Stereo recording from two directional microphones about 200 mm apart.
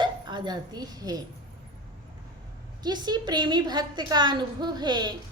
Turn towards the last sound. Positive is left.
turn(degrees=-20)  # may be behind; listen again after turning